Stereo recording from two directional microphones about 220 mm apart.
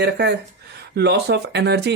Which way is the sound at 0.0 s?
50° right (ahead or behind).